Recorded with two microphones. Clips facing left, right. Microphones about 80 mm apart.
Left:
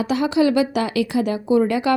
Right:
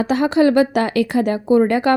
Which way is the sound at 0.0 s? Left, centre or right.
Right.